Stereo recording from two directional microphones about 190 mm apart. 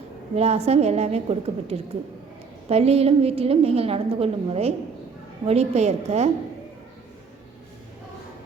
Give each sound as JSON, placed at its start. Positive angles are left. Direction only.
{"t": 0.3, "sound": "a woman's voice", "side_deg": -35}